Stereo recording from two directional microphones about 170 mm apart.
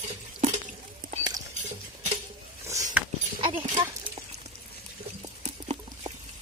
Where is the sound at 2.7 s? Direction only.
20° right (ahead or behind).